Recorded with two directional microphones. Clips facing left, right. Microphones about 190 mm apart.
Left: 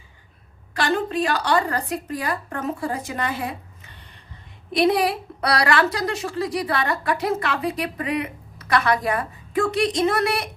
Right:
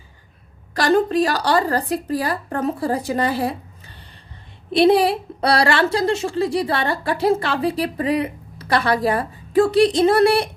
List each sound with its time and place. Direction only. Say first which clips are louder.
0.7 s a woman's voice: right 6 dB; 40° right (ahead or behind)